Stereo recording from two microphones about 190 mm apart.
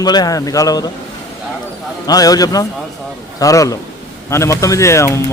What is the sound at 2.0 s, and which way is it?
A man's voice, 20° left (ahead or behind).